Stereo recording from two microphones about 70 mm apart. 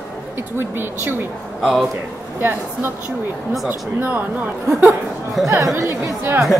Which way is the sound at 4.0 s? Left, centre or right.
Right.